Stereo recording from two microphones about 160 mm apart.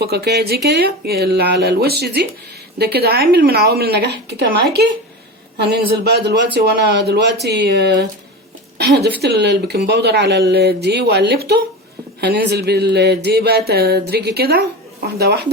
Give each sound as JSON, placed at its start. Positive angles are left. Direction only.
{"t": 0.0, "sound": "a woman's voice", "side_deg": -90}